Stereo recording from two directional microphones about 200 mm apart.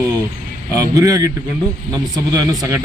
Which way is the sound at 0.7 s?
15° right (ahead or behind).